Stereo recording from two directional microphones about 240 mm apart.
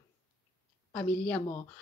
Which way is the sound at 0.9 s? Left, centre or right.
Centre.